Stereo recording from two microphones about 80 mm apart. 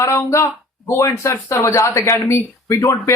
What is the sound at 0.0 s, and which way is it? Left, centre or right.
Speech, left.